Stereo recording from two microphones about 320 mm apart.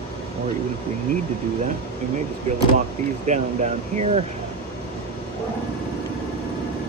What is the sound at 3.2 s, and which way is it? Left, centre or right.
Speech, right.